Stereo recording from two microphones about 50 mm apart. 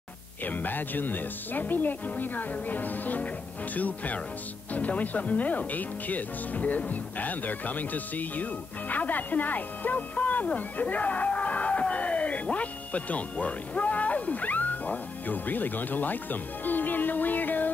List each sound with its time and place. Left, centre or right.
0.5 s speech: left